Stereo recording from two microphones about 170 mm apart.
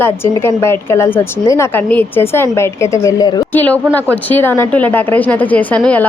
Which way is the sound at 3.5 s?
10° left (ahead or behind).